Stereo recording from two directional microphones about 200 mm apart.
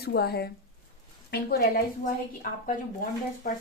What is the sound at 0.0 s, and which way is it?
Speech, 50° left (ahead or behind).